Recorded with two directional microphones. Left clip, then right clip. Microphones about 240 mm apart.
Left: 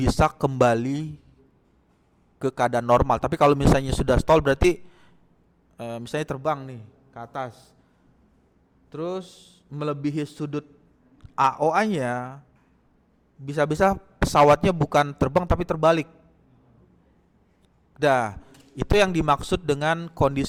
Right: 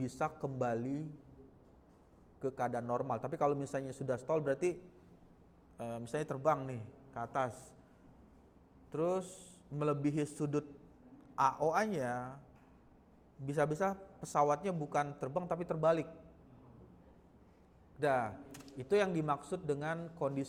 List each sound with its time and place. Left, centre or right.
0.0 s a man's voice: left
2.4 s a man's voice: left
5.7 s a man's voice: left
8.9 s a man's voice: left
13.4 s a man's voice: left
18.0 s a man's voice: left